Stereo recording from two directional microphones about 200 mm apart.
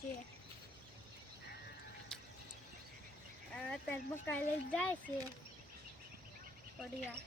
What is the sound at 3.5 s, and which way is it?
Speech, 5° left (ahead or behind).